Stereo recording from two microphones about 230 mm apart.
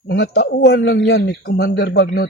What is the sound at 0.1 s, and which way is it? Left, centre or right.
Speech, left.